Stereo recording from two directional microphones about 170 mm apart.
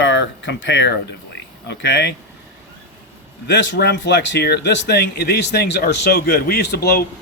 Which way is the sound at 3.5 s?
90° left.